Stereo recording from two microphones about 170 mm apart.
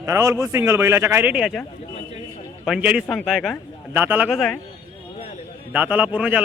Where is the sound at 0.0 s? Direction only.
15° right (ahead or behind).